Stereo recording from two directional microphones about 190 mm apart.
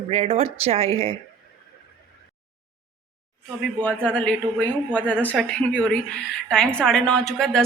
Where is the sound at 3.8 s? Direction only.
5° left (ahead or behind).